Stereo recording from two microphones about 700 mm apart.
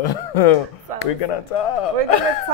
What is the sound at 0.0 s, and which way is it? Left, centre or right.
Speech, left.